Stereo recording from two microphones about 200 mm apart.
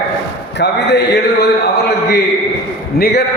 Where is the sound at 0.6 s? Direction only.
55° left (ahead or behind).